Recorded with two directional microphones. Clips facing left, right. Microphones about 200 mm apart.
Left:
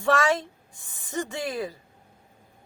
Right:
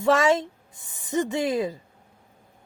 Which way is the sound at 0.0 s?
20° right (ahead or behind).